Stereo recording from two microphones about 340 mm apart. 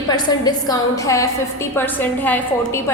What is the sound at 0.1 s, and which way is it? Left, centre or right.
A woman's voice, centre.